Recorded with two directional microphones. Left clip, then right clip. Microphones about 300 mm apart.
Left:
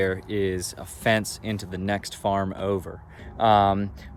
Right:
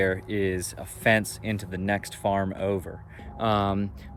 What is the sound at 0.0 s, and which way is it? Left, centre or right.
Speech, centre.